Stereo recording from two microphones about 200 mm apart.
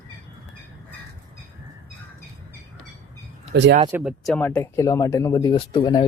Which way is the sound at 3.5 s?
55° right (ahead or behind).